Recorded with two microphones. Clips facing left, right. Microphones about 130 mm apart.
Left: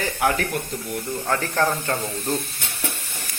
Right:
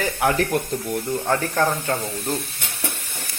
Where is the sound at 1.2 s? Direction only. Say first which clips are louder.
Even; 10° right (ahead or behind).